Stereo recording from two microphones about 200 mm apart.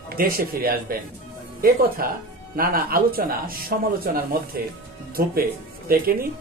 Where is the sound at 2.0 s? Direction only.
50° right (ahead or behind).